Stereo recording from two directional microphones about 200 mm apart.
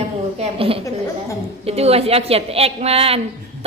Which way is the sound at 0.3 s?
30° right (ahead or behind).